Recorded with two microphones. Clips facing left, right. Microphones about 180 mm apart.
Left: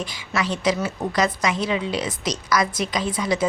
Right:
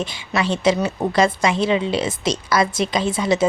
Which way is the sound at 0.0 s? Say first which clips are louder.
Right 4 dB; 25° right (ahead or behind).